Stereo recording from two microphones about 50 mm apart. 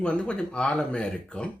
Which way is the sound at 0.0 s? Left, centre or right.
Left.